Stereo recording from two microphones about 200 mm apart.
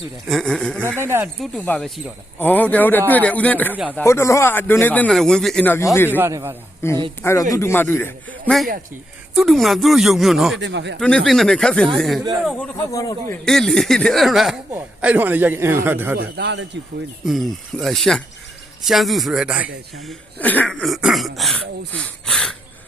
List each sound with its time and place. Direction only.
0.3 s a man's voice: centre (ahead or behind)
0.9 s a man's voice: 10° right (ahead or behind)
1.4 s speech: 5° left (ahead or behind)
6.1 s a man's voice: 10° right (ahead or behind)
6.8 s speech: 10° left (ahead or behind)
9.3 s a man's voice: centre (ahead or behind)
10.6 s a man's voice: 65° right (ahead or behind)
11.0 s a man's voice: 5° left (ahead or behind)
12.9 s speech: 15° left (ahead or behind)
13.4 s a man's voice: centre (ahead or behind)
16.1 s a man's voice: 55° right (ahead or behind)
17.2 s a man's voice: centre (ahead or behind)